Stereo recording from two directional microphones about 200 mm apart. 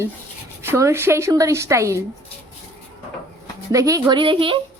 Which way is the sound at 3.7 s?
15° right (ahead or behind).